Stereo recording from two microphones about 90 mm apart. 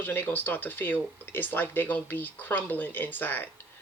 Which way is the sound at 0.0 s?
20° left (ahead or behind).